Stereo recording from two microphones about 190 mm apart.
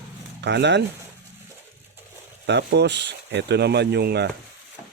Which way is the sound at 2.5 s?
60° right (ahead or behind).